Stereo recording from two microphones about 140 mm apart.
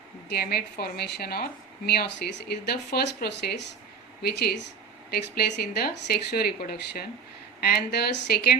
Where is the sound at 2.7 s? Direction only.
90° left.